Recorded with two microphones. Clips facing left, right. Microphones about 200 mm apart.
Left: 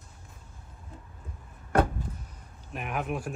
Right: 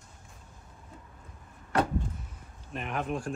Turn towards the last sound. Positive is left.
turn(degrees=5)  # may be behind; listen again after turning